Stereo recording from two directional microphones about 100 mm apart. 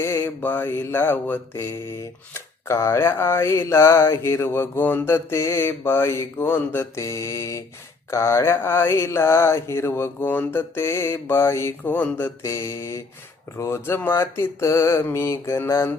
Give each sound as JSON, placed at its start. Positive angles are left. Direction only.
{"t": 0.0, "sound": "mantra", "side_deg": 25}
{"t": 12.4, "sound": "mantra", "side_deg": 30}